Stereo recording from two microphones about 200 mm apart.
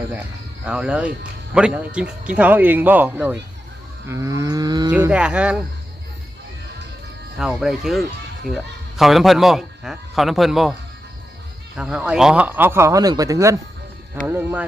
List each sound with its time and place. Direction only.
0.6 s speech: 5° right (ahead or behind)
4.0 s livestock: 15° right (ahead or behind)
4.9 s a man's voice: 5° right (ahead or behind)
7.3 s a man's voice: centre (ahead or behind)
11.8 s speech: 5° right (ahead or behind)